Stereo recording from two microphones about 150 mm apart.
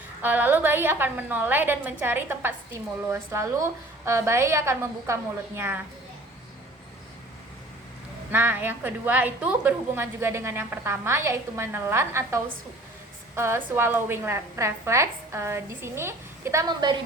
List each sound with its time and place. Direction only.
0.2 s a woman's voice: 10° right (ahead or behind)
8.3 s a woman's voice: 15° right (ahead or behind)